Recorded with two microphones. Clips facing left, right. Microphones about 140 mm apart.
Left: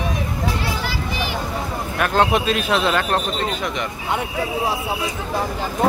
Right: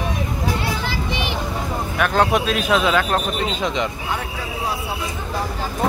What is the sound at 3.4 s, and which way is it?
Speech, 20° right (ahead or behind).